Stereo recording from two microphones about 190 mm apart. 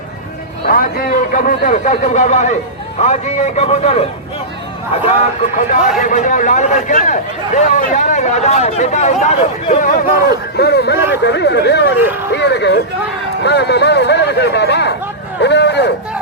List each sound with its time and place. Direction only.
0.7 s a man's voice: 50° left (ahead or behind); by 4.0 s 35° left (ahead or behind)
5.5 s a man's voice: 40° left (ahead or behind)
10.2 s speech: 60° left (ahead or behind)
11.9 s speech: 10° right (ahead or behind)
12.3 s speech: 60° left (ahead or behind)